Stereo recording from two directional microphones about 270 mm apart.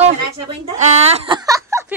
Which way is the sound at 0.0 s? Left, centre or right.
Right.